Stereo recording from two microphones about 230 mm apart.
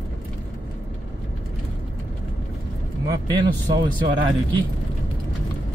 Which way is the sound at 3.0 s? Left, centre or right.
Centre.